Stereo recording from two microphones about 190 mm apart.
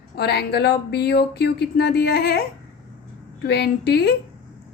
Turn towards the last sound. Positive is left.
turn(degrees=60)  # may be behind; listen again after turning